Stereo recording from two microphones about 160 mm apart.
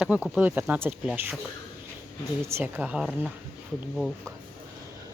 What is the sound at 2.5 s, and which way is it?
Speech, 15° right (ahead or behind).